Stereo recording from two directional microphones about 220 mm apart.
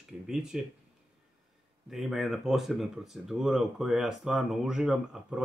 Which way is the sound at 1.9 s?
Centre (ahead or behind).